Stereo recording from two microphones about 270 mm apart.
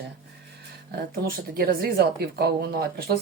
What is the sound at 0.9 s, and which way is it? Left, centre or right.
Speech, right.